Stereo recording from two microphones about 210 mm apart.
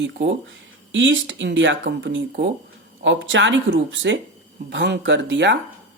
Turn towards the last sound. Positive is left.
turn(degrees=-60)  # may be behind; listen again after turning